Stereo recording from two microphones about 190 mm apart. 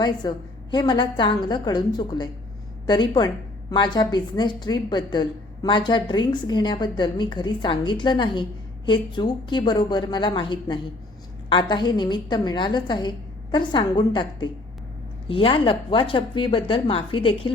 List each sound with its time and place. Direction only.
0.0 s a woman's voice: 25° left (ahead or behind)